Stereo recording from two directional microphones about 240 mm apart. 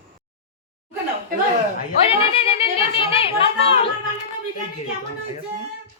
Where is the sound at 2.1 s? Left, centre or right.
Left.